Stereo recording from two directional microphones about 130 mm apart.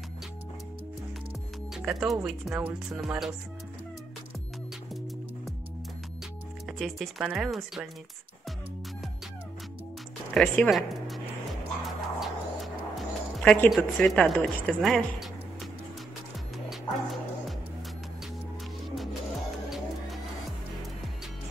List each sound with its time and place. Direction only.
1.8 s speech: 5° right (ahead or behind)
6.8 s speech: centre (ahead or behind)
10.3 s speech: 5° left (ahead or behind)
10.7 s a sound: centre (ahead or behind)
11.8 s music: centre (ahead or behind)
13.7 s speech: centre (ahead or behind)
16.6 s music: centre (ahead or behind)